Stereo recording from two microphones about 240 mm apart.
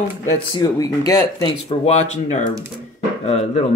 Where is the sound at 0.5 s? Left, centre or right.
Centre.